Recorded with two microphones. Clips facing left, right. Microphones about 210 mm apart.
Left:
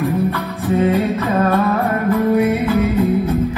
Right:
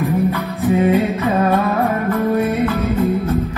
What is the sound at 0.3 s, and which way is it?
Music, 15° right (ahead or behind).